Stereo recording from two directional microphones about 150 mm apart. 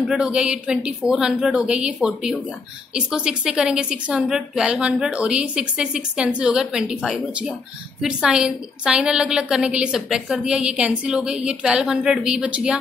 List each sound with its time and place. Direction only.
0.0 s a woman's voice: 5° right (ahead or behind)